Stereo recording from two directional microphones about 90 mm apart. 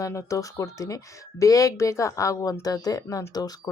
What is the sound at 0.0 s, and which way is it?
Speech, 35° left (ahead or behind).